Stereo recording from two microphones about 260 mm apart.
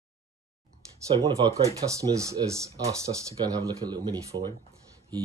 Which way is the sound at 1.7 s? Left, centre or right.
Centre.